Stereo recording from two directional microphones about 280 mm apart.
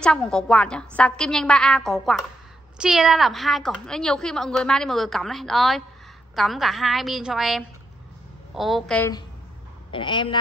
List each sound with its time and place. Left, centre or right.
0.0 s a woman's voice: centre
9.8 s a woman's voice: centre